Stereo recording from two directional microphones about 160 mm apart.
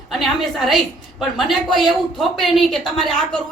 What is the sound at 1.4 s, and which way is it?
A man's voice, centre (ahead or behind).